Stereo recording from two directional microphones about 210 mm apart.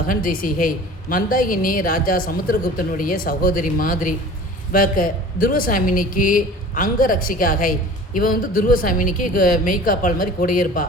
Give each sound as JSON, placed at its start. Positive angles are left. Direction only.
{"t": 0.1, "sound": "a woman's voice", "side_deg": 40}